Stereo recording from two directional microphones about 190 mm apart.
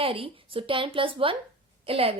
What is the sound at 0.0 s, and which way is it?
A woman's voice, 30° right (ahead or behind).